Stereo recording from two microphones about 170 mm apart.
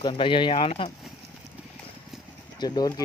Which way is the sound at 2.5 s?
25° left (ahead or behind).